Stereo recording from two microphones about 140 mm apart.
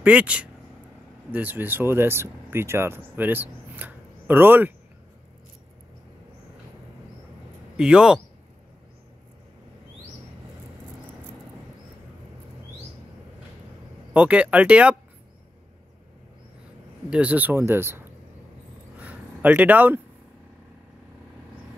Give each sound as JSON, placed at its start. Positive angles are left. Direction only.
{"t": 0.0, "sound": "speech", "side_deg": -10}
{"t": 7.7, "sound": "speech", "side_deg": -5}
{"t": 14.1, "sound": "speech", "side_deg": -10}
{"t": 17.1, "sound": "speech", "side_deg": -10}
{"t": 18.9, "sound": "a sound", "side_deg": -10}